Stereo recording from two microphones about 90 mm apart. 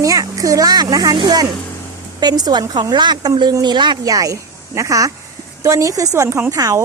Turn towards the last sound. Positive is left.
turn(degrees=-40)  # may be behind; listen again after turning